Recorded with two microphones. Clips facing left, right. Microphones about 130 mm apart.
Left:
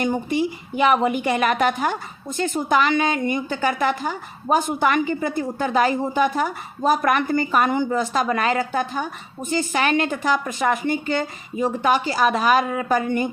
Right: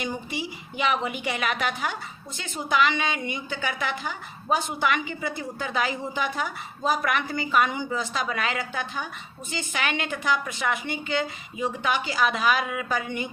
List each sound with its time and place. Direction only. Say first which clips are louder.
0.0 s a woman's voice: left 10 dB; 50° left (ahead or behind)